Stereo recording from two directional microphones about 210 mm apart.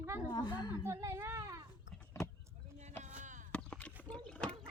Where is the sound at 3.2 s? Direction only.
35° right (ahead or behind).